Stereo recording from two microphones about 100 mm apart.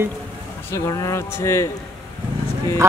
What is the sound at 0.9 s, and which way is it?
Speech, 30° left (ahead or behind).